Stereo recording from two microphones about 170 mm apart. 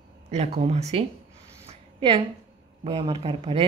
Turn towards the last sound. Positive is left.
turn(degrees=-35)  # may be behind; listen again after turning